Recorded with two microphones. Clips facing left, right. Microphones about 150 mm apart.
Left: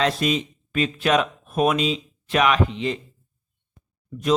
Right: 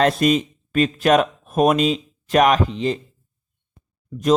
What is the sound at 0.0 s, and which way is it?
Speech, 45° right (ahead or behind).